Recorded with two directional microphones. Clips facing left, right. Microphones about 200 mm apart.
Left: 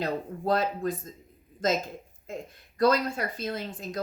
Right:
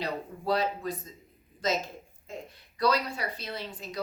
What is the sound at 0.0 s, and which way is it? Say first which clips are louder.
A woman's voice: left 3 dB; 50° left (ahead or behind).